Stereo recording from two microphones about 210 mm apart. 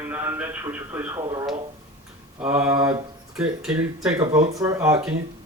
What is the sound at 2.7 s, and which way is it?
Speech, 20° right (ahead or behind).